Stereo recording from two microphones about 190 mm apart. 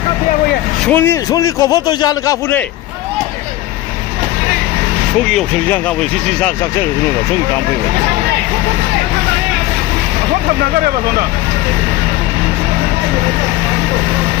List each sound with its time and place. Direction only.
0.9 s a man's voice: 10° left (ahead or behind)
5.3 s speech: 5° left (ahead or behind)